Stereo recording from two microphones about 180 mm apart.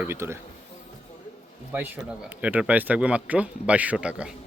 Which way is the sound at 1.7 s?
10° right (ahead or behind).